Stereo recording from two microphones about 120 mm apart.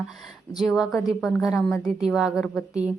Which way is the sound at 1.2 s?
25° left (ahead or behind).